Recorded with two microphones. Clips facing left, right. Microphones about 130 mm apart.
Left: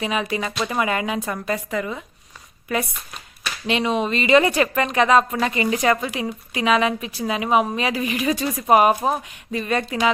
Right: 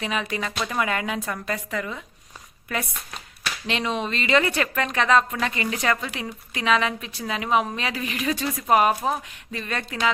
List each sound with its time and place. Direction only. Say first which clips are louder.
0.0 s speech: left 4 dB; 5° left (ahead or behind)
3.4 s speech: left 5 dB; 10° left (ahead or behind)